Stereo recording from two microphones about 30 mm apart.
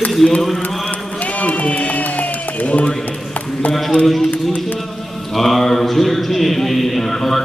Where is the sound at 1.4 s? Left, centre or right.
Left.